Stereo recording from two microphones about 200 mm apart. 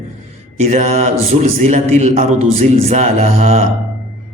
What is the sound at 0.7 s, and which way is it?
Speech, 35° right (ahead or behind).